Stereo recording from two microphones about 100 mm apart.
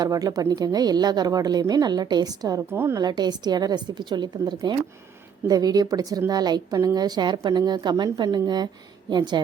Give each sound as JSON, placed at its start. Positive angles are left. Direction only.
{"t": 0.0, "sound": "a woman's voice", "side_deg": -40}
{"t": 2.7, "sound": "a woman's voice", "side_deg": -25}
{"t": 3.0, "sound": "a woman's voice", "side_deg": -45}